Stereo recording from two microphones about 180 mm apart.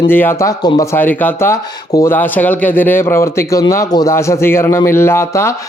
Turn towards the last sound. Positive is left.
turn(degrees=15)  # may be behind; listen again after turning